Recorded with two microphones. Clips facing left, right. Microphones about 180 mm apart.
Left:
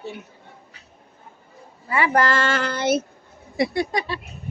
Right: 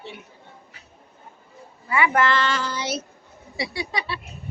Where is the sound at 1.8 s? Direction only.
30° left (ahead or behind).